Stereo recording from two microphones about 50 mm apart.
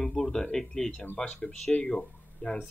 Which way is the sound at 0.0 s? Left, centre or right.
Centre.